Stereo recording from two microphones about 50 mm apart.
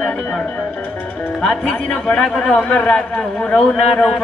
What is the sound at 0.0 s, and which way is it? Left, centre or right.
Speech, centre.